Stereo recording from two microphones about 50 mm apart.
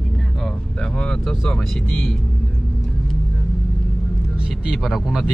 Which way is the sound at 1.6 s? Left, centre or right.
Centre.